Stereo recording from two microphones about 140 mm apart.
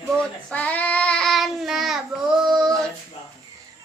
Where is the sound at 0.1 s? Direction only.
10° left (ahead or behind).